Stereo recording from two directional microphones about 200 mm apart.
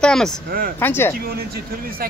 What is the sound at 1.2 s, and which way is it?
Speech, 50° right (ahead or behind).